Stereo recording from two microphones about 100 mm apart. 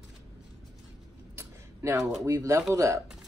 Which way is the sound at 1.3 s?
25° right (ahead or behind).